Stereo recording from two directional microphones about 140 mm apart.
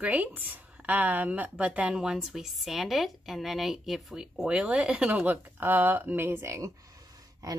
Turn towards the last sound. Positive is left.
turn(degrees=-25)  # may be behind; listen again after turning